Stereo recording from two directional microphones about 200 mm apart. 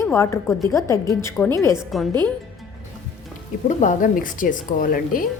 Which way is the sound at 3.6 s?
40° left (ahead or behind).